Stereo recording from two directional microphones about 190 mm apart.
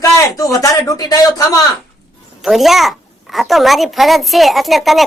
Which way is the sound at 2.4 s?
Centre (ahead or behind).